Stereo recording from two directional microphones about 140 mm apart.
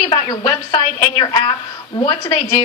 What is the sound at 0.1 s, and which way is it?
A woman's voice, 30° left (ahead or behind).